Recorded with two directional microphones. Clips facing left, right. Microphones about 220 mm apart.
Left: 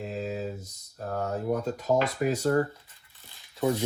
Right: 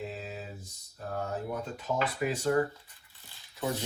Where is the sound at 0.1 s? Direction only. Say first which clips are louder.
Left 8 dB; 40° left (ahead or behind).